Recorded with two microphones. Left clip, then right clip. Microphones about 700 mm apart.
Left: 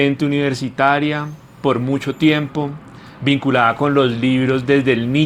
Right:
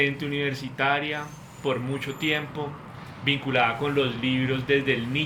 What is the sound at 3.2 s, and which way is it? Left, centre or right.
Speech, left.